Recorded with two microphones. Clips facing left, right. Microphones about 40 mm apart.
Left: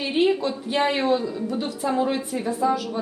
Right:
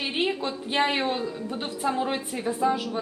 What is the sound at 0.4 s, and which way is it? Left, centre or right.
A woman's voice, centre.